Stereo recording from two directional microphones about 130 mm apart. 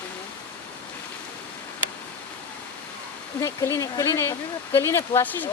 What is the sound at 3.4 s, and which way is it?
Speech, 20° left (ahead or behind).